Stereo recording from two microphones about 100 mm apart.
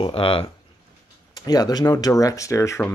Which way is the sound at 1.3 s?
40° left (ahead or behind).